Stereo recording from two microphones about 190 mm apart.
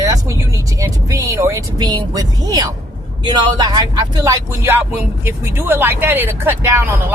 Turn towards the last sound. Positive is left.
turn(degrees=-15)  # may be behind; listen again after turning